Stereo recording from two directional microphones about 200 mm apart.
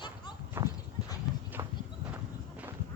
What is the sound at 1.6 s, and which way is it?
Horse, 15° right (ahead or behind).